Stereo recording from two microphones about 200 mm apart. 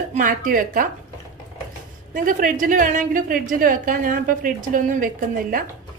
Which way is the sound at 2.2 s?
45° right (ahead or behind).